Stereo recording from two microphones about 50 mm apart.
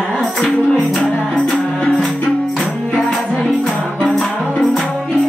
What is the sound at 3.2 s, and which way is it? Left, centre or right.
Music, centre.